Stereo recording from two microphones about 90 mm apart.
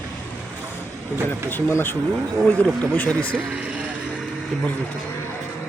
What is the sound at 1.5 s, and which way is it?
Speech, 25° left (ahead or behind).